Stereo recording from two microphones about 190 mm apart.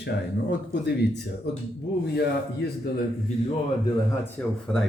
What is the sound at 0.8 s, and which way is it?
Speech, 60° left (ahead or behind).